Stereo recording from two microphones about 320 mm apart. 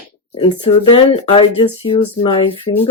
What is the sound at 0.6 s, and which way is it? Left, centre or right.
Speech, centre.